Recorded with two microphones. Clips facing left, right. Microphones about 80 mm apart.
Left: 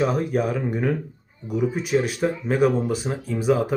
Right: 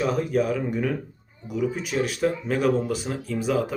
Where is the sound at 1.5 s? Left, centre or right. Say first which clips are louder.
Left 3 dB; left.